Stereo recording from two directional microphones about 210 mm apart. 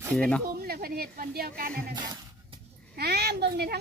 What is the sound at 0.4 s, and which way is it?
Speech, 45° right (ahead or behind).